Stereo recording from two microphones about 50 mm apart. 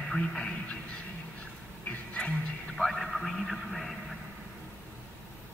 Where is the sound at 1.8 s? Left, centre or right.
Left.